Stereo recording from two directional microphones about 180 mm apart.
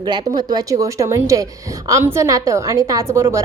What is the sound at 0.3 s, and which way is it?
A woman's voice, 20° right (ahead or behind).